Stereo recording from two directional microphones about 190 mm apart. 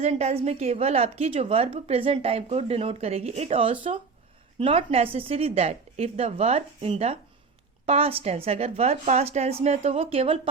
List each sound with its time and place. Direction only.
0.0 s a woman's voice: 35° right (ahead or behind)